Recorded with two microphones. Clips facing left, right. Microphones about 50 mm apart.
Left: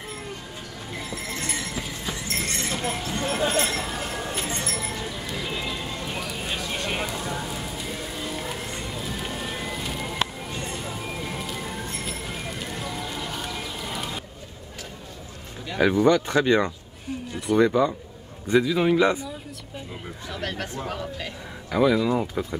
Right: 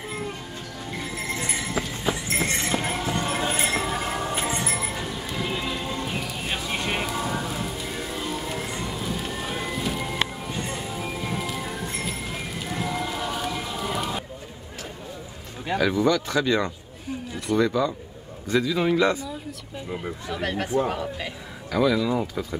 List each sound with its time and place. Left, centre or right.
2.2 s clip-clop: right
3.1 s clip-clop: centre
3.8 s music: centre
6.5 s a sound: centre
7.2 s rain on surface: centre
9.7 s music: centre
12.1 s bird: centre
13.4 s rain: centre
15.8 s speech: left
19.9 s speech: centre
21.6 s speech: centre